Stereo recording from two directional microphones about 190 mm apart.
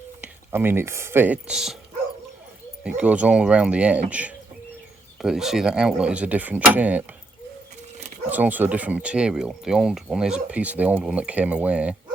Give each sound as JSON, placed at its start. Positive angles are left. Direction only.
{"t": 0.2, "sound": "speech", "side_deg": -10}
{"t": 2.8, "sound": "speech", "side_deg": -5}
{"t": 8.3, "sound": "speech", "side_deg": -10}